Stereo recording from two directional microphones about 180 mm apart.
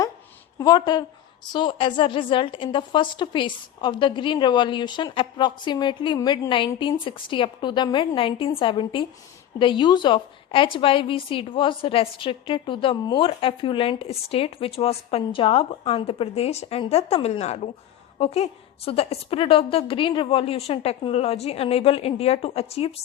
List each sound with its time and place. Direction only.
0.6 s a woman's voice: 20° left (ahead or behind)